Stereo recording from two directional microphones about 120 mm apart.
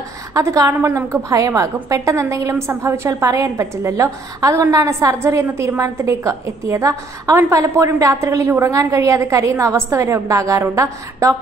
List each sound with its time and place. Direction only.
0.3 s a woman's voice: 25° right (ahead or behind)